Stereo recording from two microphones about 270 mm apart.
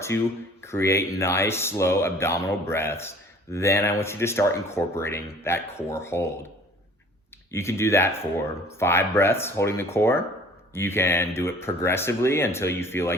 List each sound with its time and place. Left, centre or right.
0.1 s speech: centre
7.5 s speech: centre